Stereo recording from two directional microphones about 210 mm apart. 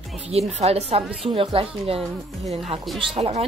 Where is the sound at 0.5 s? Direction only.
30° right (ahead or behind).